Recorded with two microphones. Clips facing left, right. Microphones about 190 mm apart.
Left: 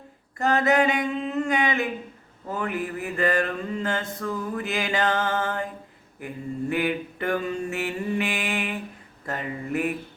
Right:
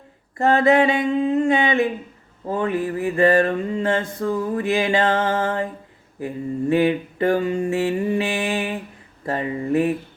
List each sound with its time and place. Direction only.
0.3 s mantra: 30° right (ahead or behind)